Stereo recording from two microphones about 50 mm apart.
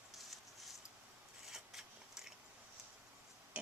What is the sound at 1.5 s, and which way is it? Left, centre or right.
Biting, centre.